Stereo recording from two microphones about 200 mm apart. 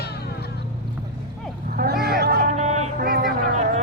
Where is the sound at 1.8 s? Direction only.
50° right (ahead or behind).